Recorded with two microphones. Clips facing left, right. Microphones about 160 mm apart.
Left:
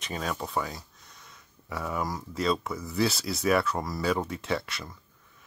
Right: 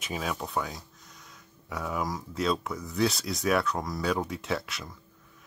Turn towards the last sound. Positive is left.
turn(degrees=0)  # may be behind; listen again after turning